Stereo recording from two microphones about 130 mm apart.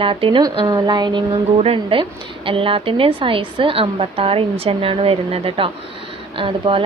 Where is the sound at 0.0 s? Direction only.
40° right (ahead or behind).